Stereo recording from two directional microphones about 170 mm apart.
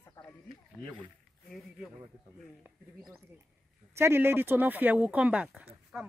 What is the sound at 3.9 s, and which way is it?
Speech, 15° right (ahead or behind).